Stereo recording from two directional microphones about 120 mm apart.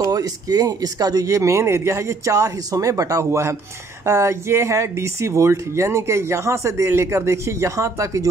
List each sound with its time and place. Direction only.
0.1 s speech: 30° right (ahead or behind)